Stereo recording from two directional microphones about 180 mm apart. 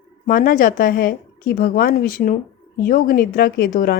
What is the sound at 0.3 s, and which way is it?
A woman's voice, 50° left (ahead or behind).